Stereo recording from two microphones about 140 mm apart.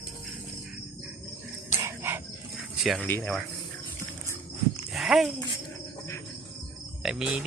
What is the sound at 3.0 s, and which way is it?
Speech, 15° left (ahead or behind).